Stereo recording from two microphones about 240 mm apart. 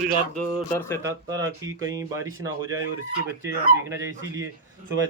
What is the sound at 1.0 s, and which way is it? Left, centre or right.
Speech, centre.